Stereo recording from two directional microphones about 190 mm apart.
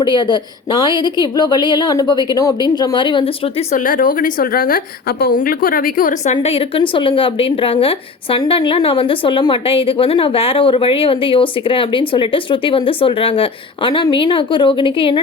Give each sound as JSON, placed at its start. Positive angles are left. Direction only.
{"t": 0.0, "sound": "speech", "side_deg": 25}
{"t": 3.8, "sound": "speech", "side_deg": 45}